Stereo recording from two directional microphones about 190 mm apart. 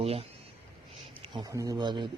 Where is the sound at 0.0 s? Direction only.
30° right (ahead or behind).